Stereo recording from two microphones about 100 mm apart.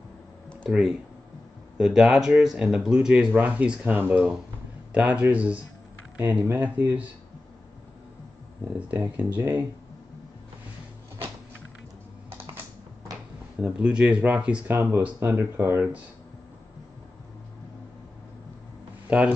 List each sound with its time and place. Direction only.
0.7 s speech: 5° right (ahead or behind)
4.9 s speech: 10° right (ahead or behind)
8.7 s speech: 15° right (ahead or behind)
13.6 s speech: 10° right (ahead or behind)
19.1 s speech: 10° right (ahead or behind)